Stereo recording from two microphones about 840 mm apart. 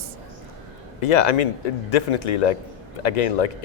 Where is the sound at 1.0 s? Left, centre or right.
Left.